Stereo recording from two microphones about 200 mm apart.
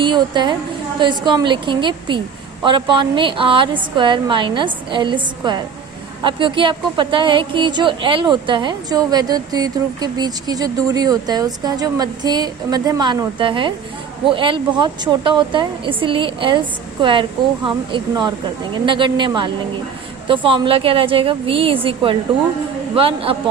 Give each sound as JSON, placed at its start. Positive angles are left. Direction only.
{"t": 0.0, "sound": "speech", "side_deg": -25}